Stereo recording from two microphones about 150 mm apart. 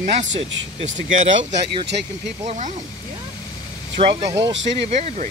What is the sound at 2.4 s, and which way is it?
Speech, 55° right (ahead or behind).